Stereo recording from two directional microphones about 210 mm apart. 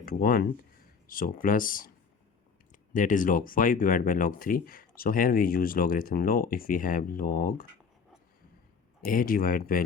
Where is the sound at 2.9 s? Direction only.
40° left (ahead or behind).